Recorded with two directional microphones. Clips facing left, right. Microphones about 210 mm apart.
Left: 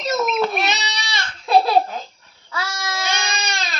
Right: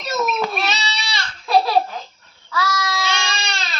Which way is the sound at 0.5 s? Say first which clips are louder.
Left 1 dB; 20° left (ahead or behind).